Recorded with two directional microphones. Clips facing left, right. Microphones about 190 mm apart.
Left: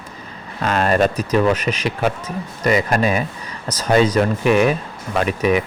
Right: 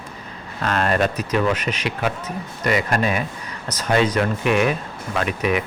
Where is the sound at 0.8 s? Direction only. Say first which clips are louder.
Left 4 dB; 40° left (ahead or behind).